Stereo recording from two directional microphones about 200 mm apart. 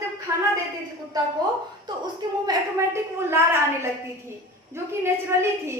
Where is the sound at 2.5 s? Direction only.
15° right (ahead or behind).